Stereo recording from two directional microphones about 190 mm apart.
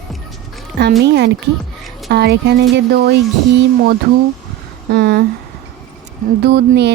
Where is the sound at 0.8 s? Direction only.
60° right (ahead or behind).